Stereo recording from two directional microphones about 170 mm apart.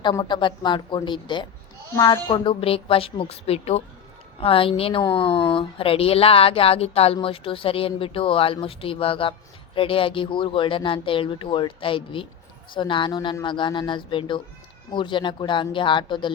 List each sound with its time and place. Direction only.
0.0 s a woman's voice: 25° left (ahead or behind)